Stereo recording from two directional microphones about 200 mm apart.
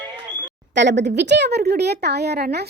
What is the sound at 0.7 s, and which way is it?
Speech, 60° right (ahead or behind).